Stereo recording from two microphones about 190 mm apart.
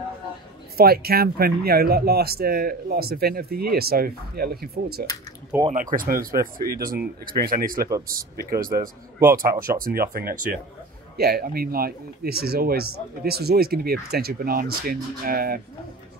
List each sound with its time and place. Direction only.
0.7 s speech: 55° right (ahead or behind)